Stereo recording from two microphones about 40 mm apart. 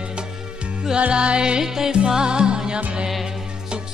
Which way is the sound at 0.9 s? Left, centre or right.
Right.